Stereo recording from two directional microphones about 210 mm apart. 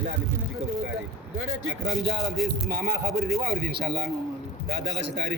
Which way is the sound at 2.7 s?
45° right (ahead or behind).